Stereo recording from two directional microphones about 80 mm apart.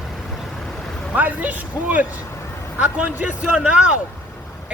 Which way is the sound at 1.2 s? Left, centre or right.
Centre.